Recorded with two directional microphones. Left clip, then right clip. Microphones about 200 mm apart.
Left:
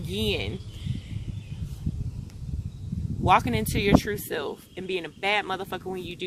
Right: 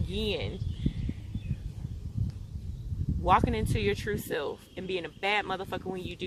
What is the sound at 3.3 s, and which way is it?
Speech, 45° left (ahead or behind).